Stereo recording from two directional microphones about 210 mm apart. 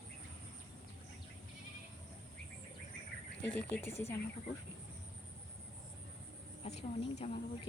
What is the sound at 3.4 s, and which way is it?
Speech, 10° left (ahead or behind).